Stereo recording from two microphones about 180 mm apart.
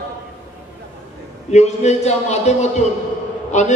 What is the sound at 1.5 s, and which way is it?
Speech, 40° left (ahead or behind).